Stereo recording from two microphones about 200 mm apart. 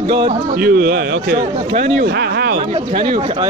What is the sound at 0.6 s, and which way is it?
Speech, 50° right (ahead or behind).